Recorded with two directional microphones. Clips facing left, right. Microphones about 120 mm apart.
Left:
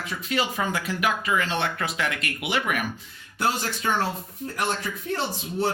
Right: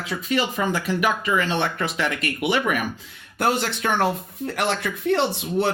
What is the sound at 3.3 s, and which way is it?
Speech, 60° right (ahead or behind).